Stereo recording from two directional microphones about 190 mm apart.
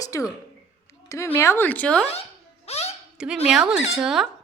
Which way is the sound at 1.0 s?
15° left (ahead or behind).